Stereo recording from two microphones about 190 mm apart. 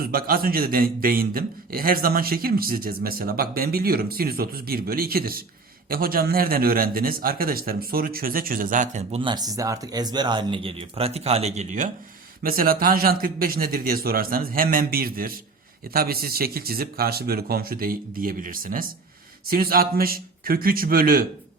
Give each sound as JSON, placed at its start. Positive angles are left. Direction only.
{"t": 0.0, "sound": "a man's voice", "side_deg": -50}
{"t": 9.2, "sound": "speech", "side_deg": -20}
{"t": 12.4, "sound": "a man's voice", "side_deg": -50}